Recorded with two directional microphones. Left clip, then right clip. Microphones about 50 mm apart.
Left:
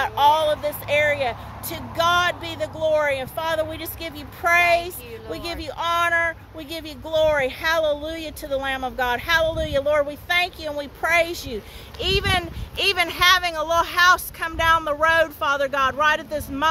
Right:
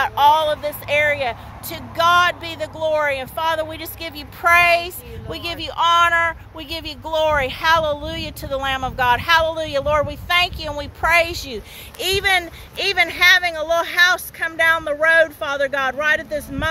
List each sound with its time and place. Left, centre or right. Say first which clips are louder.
0.0 s speech: right 3 dB; centre
12.0 s speech: right 4 dB; right
12.7 s a woman's voice: right 2 dB; right
16.3 s speech: right 2 dB; centre